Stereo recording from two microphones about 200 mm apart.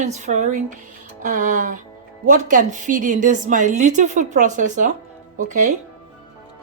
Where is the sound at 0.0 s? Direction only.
35° right (ahead or behind).